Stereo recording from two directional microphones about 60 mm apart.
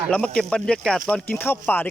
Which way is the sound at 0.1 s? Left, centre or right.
Centre.